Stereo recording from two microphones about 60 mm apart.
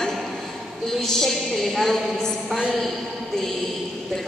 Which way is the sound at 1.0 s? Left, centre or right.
Centre.